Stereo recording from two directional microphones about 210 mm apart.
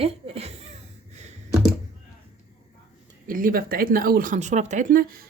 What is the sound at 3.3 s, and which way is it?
Speech, 40° right (ahead or behind).